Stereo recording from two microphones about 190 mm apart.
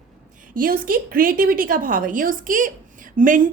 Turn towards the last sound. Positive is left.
turn(degrees=-45)  # may be behind; listen again after turning